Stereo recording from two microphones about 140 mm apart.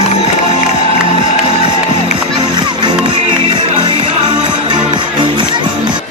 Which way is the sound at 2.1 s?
30° right (ahead or behind).